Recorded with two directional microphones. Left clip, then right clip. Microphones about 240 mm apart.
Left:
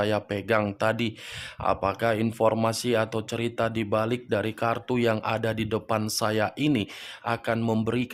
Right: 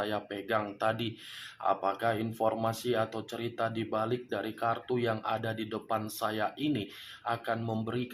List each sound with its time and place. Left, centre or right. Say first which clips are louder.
0.0 s speech: left 8 dB; left